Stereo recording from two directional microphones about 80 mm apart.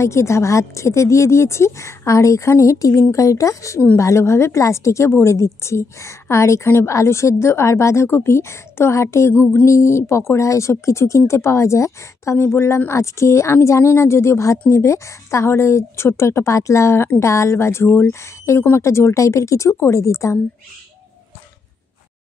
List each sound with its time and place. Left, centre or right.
0.0 s a woman's voice: left